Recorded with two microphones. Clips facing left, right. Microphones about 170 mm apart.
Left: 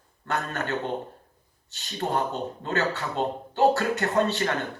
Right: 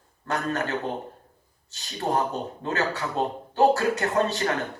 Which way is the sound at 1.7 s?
40° right (ahead or behind).